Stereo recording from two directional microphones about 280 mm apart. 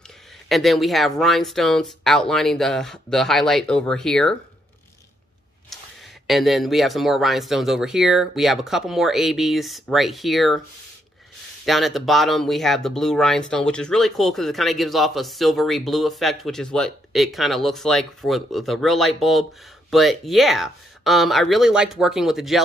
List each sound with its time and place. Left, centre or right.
0.5 s speech: centre
6.2 s speech: centre
11.6 s speech: centre